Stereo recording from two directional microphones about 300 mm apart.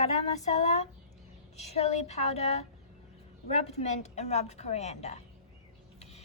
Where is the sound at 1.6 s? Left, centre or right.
Left.